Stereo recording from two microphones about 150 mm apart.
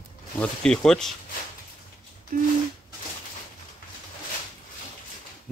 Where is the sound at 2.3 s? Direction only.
80° right.